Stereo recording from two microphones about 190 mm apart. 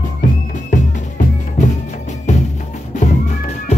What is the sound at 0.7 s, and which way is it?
Music, 45° left (ahead or behind).